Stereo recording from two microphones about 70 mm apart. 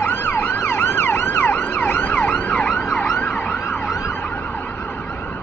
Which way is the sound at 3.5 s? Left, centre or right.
Left.